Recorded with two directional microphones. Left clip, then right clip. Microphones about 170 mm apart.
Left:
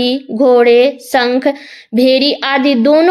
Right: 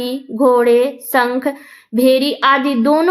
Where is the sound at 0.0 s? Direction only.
25° left (ahead or behind).